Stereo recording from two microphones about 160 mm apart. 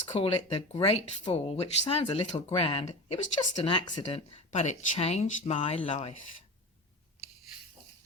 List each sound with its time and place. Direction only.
0.1 s speech: 40° left (ahead or behind)